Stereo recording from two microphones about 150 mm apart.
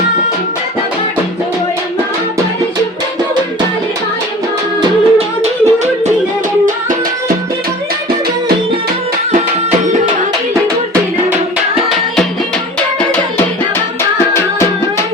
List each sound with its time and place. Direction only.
4.8 s music: 45° right (ahead or behind)